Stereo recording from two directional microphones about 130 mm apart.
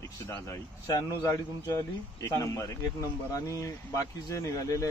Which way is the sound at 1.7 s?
25° left (ahead or behind).